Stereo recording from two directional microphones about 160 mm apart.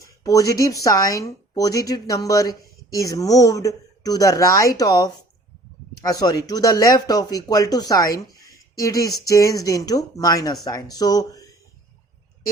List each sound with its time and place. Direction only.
0.0 s speech: 20° left (ahead or behind)